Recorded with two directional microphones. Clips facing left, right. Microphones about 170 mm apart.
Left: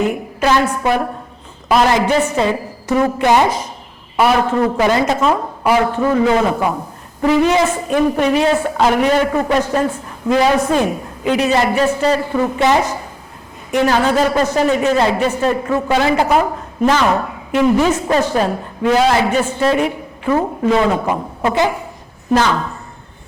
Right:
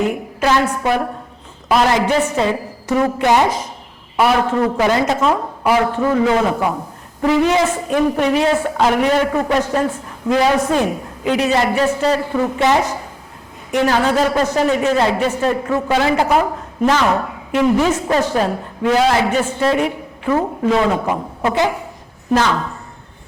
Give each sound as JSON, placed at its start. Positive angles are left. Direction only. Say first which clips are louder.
{"t": 0.3, "sound": "a woman's voice", "louder": "left 1 dB", "side_deg": 15}
{"t": 20.3, "sound": "a woman's voice", "louder": "left 1 dB", "side_deg": 25}
{"t": 21.5, "sound": "a woman's voice", "louder": "left 1 dB", "side_deg": 15}